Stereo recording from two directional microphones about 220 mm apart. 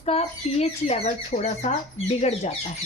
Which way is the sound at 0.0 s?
30° left (ahead or behind).